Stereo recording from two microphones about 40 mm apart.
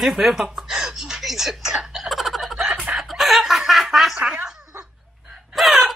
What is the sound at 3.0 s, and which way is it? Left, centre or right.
Snicker, centre.